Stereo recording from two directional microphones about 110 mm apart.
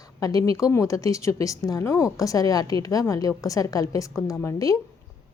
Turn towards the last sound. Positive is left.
turn(degrees=30)  # may be behind; listen again after turning